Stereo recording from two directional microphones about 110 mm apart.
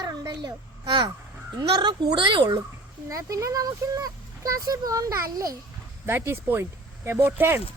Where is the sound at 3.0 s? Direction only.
30° right (ahead or behind).